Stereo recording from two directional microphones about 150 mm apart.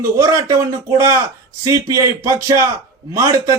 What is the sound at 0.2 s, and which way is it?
A man's voice, 20° right (ahead or behind).